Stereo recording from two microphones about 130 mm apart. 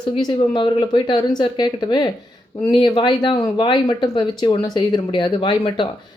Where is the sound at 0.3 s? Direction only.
40° left (ahead or behind).